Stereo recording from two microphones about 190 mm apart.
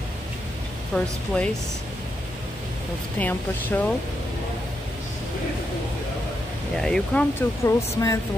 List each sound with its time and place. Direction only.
0.9 s speech: 5° left (ahead or behind)
3.2 s speech: 10° left (ahead or behind)
6.8 s speech: 5° left (ahead or behind)